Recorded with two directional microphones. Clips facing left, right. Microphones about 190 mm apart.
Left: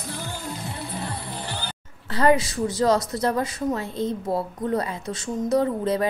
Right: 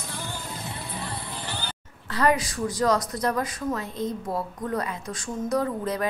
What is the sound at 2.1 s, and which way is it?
Speech, 25° left (ahead or behind).